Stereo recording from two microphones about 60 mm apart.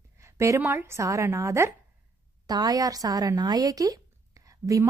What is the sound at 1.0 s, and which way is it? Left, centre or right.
Speech, right.